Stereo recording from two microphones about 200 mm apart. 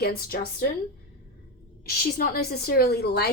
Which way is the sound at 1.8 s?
50° left (ahead or behind).